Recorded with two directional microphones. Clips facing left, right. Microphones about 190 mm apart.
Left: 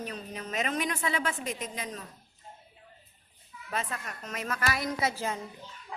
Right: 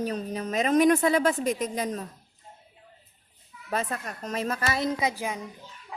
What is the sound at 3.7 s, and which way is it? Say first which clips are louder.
A woman's voice: right 5 dB; 40° right (ahead or behind).